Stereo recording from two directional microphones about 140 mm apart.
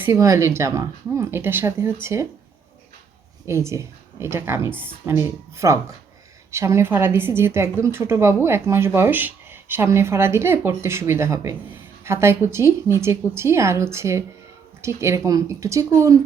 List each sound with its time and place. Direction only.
0.0 s speech: 20° right (ahead or behind)
3.4 s a woman's voice: 20° right (ahead or behind)